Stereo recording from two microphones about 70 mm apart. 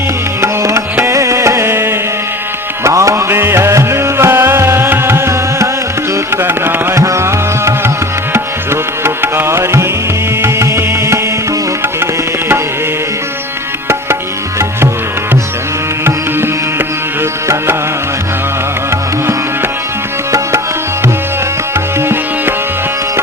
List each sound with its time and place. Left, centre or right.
0.4 s music: right
6.9 s music: right
8.3 s tabla: right
10.4 s music: right
16.0 s music: right
21.9 s music: right